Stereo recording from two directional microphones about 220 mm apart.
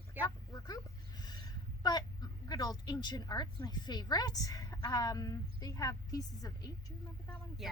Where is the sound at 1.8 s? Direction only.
20° left (ahead or behind).